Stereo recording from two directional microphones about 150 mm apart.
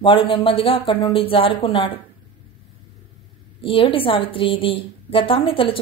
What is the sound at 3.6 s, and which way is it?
A woman's voice, 35° left (ahead or behind).